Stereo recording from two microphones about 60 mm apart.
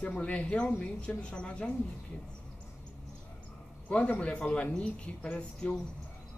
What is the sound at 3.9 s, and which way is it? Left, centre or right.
Speech, centre.